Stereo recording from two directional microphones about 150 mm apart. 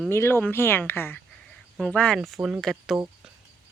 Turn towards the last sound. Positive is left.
turn(degrees=-5)  # may be behind; listen again after turning